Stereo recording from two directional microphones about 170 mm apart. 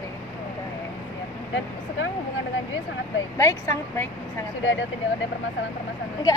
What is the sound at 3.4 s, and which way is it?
Speech, 15° left (ahead or behind).